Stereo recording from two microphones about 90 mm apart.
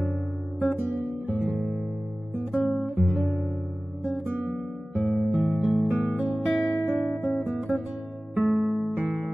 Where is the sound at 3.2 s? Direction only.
Centre (ahead or behind).